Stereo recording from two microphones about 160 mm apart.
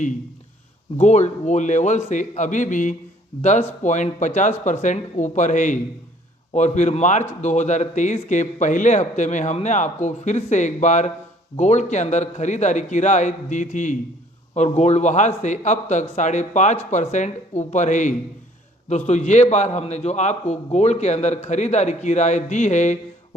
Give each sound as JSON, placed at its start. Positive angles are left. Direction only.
{"t": 0.9, "sound": "speech", "side_deg": 45}